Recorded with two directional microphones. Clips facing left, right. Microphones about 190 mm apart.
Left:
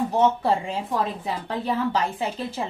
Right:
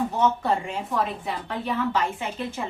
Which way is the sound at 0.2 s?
30° left (ahead or behind).